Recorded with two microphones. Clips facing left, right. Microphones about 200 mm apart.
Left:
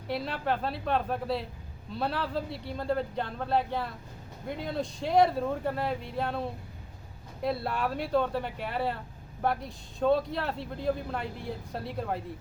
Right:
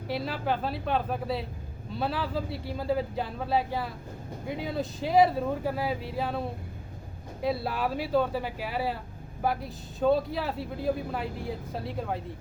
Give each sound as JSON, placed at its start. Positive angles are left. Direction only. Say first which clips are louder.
{"t": 0.1, "sound": "speech", "louder": "right 1 dB", "side_deg": 0}
{"t": 7.4, "sound": "speech", "louder": "right 1 dB", "side_deg": 0}